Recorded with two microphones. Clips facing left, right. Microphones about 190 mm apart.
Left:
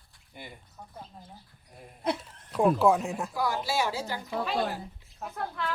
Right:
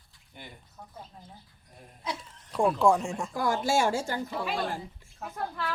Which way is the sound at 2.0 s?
60° left (ahead or behind).